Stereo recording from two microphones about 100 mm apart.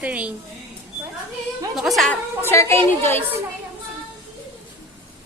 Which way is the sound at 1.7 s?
Centre (ahead or behind).